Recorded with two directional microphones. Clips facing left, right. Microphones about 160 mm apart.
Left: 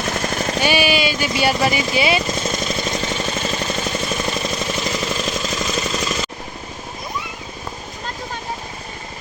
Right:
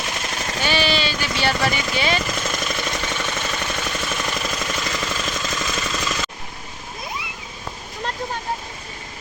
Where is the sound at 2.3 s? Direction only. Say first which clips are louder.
Left 3 dB; 25° left (ahead or behind).